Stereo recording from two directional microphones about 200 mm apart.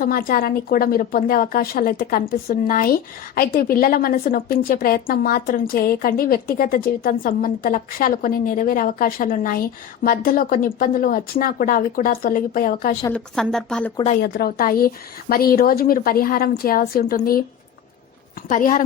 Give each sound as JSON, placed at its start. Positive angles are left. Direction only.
{"t": 0.0, "sound": "speech", "side_deg": 45}
{"t": 13.1, "sound": "speech", "side_deg": 0}
{"t": 14.2, "sound": "speech", "side_deg": 50}
{"t": 18.4, "sound": "a woman's voice", "side_deg": 40}